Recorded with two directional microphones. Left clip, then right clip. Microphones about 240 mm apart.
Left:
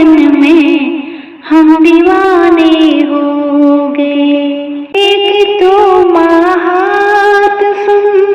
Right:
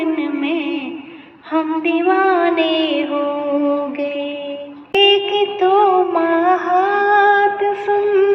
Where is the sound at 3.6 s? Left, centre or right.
Left.